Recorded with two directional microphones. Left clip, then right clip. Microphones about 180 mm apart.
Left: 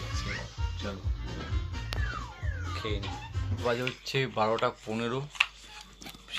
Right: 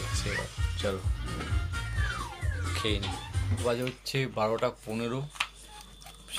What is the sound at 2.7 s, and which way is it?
Speech, 15° right (ahead or behind).